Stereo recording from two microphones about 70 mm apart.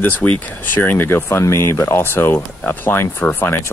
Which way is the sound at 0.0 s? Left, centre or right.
Left.